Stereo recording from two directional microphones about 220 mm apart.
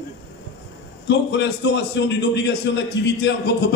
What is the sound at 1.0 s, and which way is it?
A man's voice, 55° left (ahead or behind).